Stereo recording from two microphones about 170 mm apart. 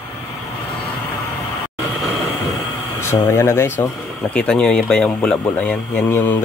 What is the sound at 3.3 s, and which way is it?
Speech, 15° left (ahead or behind).